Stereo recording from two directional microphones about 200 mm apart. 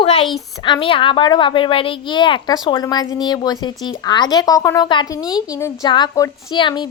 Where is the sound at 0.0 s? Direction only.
30° left (ahead or behind).